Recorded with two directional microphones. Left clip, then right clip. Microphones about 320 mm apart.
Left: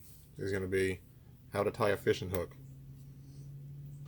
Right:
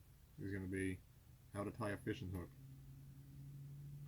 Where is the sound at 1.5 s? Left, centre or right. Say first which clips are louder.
Left 15 dB; left.